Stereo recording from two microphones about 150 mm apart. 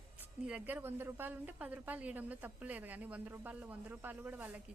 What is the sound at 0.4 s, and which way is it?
A woman's voice, 10° right (ahead or behind).